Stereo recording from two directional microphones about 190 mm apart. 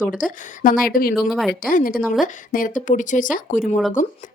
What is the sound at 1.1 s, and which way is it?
Speech, centre (ahead or behind).